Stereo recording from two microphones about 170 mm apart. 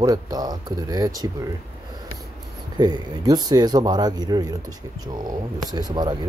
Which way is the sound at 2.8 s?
25° right (ahead or behind).